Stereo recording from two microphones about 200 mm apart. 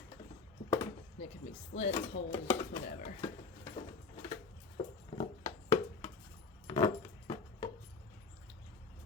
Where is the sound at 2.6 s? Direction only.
35° left (ahead or behind).